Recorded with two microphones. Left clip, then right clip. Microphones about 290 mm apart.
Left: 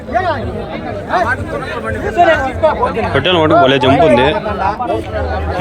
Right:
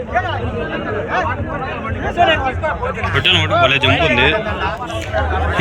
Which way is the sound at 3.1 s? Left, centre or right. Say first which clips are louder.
Left 3 dB; centre.